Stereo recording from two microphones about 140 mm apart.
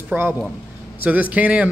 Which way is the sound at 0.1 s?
15° right (ahead or behind).